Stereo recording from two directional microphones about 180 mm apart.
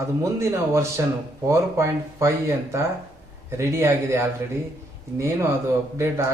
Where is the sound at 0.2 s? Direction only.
15° right (ahead or behind).